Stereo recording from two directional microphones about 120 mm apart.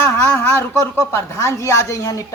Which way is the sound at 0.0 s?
20° left (ahead or behind).